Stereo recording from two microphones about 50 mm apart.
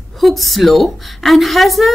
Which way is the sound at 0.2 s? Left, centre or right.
Centre.